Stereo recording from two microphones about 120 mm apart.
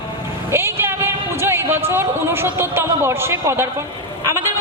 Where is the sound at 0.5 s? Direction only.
20° right (ahead or behind).